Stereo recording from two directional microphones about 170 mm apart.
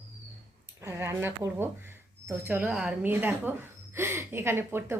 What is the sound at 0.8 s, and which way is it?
A woman's voice, 15° right (ahead or behind).